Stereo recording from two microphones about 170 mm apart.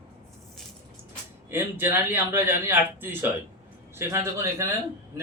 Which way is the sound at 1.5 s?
10° right (ahead or behind).